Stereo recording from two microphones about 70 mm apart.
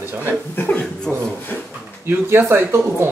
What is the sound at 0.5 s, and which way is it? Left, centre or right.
Chuckle, left.